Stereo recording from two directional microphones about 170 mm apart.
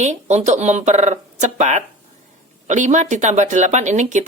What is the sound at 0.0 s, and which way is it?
Speech, 45° right (ahead or behind).